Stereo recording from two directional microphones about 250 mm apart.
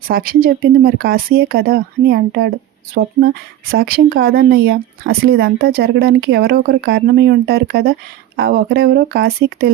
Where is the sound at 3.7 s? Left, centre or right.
Right.